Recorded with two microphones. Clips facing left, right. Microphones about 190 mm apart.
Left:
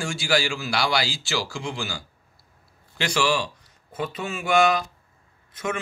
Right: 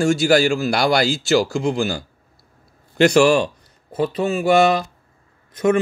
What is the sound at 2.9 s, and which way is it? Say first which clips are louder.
Speech: right 11 dB; 45° right (ahead or behind).